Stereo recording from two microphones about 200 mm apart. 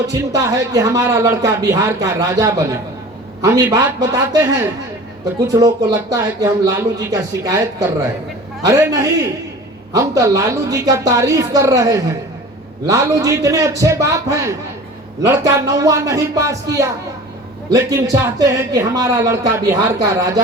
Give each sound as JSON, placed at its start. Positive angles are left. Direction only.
{"t": 0.1, "sound": "speech", "side_deg": -15}